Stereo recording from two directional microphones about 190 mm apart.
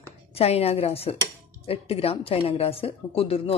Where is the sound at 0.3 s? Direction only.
30° left (ahead or behind).